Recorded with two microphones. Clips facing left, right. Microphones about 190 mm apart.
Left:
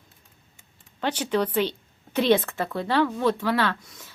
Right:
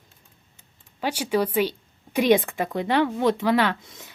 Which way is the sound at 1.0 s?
10° right (ahead or behind).